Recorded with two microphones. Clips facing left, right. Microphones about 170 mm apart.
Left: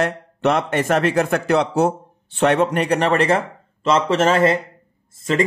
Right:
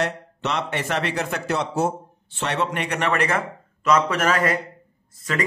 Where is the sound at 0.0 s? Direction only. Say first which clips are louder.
Left 6 dB; 50° left (ahead or behind).